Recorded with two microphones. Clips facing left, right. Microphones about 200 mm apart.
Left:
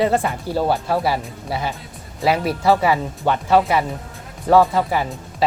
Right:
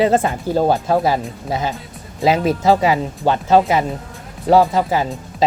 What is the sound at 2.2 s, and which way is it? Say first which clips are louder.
Speech: right 3 dB; 20° right (ahead or behind).